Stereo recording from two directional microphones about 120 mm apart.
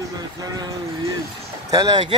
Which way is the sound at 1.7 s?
35° right (ahead or behind).